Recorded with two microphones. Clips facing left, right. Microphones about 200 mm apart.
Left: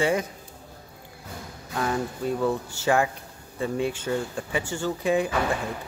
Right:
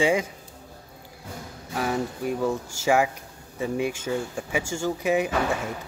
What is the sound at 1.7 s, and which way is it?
Speech, 10° right (ahead or behind).